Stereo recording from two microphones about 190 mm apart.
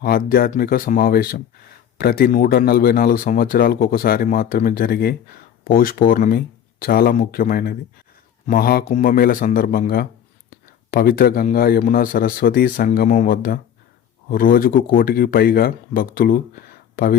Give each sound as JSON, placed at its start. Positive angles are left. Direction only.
{"t": 0.0, "sound": "speech", "side_deg": 50}
{"t": 8.8, "sound": "speech", "side_deg": 40}